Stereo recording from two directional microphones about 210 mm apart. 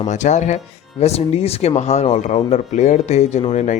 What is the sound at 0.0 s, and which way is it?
Speech, 35° left (ahead or behind).